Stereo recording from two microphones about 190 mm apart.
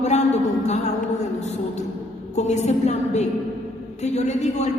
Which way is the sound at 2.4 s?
35° left (ahead or behind).